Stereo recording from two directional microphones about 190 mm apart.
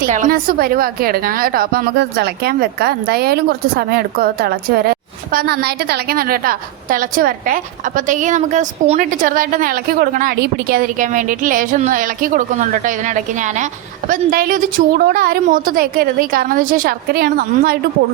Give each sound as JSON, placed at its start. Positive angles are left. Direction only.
{"t": 0.0, "sound": "a woman's voice", "side_deg": -45}